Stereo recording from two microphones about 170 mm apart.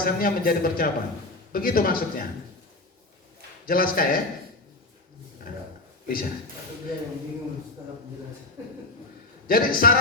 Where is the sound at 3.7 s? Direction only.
60° left (ahead or behind).